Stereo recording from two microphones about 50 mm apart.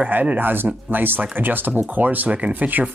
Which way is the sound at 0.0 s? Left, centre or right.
Right.